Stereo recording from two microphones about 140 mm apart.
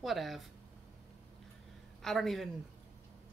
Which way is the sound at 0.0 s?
Centre (ahead or behind).